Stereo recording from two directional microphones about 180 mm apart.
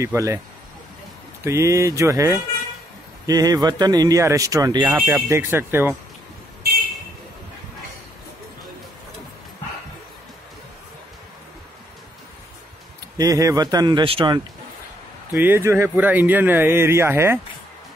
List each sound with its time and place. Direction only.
0.0 s speech: 15° right (ahead or behind)
1.4 s speech: 15° right (ahead or behind)
13.2 s speech: 20° right (ahead or behind)
15.3 s speech: 10° right (ahead or behind)